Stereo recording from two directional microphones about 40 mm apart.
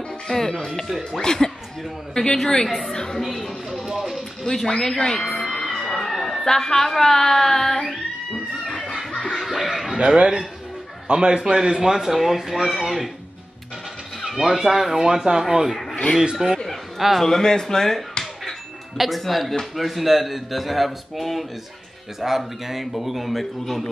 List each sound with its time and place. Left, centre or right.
0.3 s speech: centre
3.2 s speech: centre
4.9 s speech: centre
5.4 s music: centre
6.4 s speech: centre
8.9 s snicker: centre
9.9 s speech: right; by 13.1 s centre
14.6 s speech: centre
15.7 s a sound: centre
16.4 s speech: centre
17.0 s speech: centre